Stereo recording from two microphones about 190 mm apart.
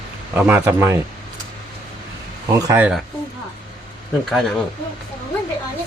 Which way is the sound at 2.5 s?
15° right (ahead or behind).